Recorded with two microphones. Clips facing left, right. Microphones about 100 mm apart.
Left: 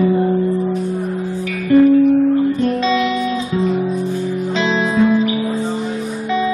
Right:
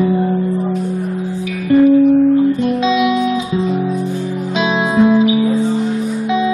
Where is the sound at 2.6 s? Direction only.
15° right (ahead or behind).